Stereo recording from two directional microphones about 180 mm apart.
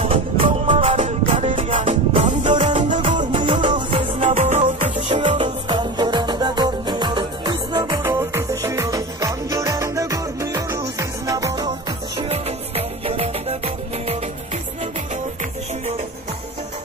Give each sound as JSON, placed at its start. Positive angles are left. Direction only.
{"t": 0.0, "sound": "music", "side_deg": -30}
{"t": 3.2, "sound": "music", "side_deg": -30}
{"t": 5.7, "sound": "music", "side_deg": -25}
{"t": 12.2, "sound": "music", "side_deg": -35}